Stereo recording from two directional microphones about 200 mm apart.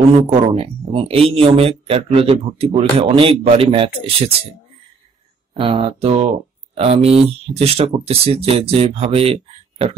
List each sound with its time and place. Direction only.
0.3 s speech: 25° right (ahead or behind)
5.5 s speech: 25° right (ahead or behind)